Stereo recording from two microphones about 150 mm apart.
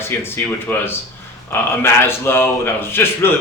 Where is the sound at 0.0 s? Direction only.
15° left (ahead or behind).